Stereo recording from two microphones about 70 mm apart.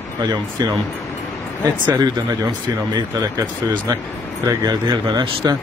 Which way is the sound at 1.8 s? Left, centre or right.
Right.